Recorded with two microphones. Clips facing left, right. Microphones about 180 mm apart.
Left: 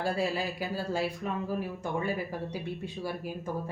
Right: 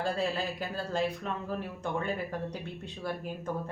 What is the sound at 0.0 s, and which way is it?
Speech, 10° left (ahead or behind).